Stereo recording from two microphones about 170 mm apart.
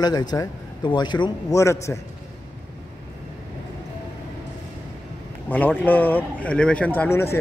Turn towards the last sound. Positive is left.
turn(degrees=15)  # may be behind; listen again after turning